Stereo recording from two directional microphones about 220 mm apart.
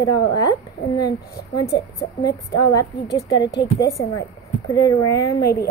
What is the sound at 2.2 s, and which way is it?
A woman's voice, 15° left (ahead or behind).